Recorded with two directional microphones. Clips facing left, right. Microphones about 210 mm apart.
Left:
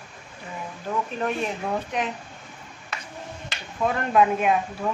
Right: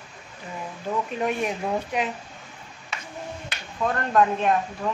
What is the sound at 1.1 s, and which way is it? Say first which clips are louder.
Speech: right 1 dB; 15° right (ahead or behind).